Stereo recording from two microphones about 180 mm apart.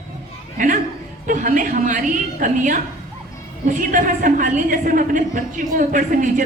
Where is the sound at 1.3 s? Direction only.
45° right (ahead or behind).